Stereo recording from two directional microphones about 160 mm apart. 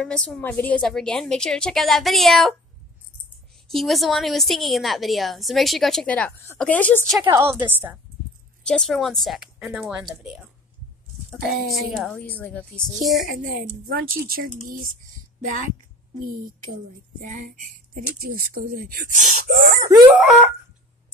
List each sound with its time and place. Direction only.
0.0 s a woman's voice: 5° left (ahead or behind)
3.6 s a woman's voice: centre (ahead or behind)
7.2 s a woman's voice: 15° right (ahead or behind)
8.6 s a woman's voice: 5° left (ahead or behind)
11.8 s a woman's voice: centre (ahead or behind)
12.2 s speech: 10° left (ahead or behind)
13.3 s speech: 70° right (ahead or behind)
17.2 s speech: 55° right (ahead or behind)
17.9 s speech: 65° right (ahead or behind)
20.2 s a woman's voice: 5° right (ahead or behind)